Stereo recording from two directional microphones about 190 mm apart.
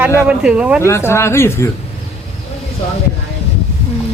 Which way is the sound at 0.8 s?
15° left (ahead or behind).